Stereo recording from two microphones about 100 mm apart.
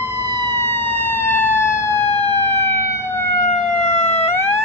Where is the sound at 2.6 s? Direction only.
25° left (ahead or behind).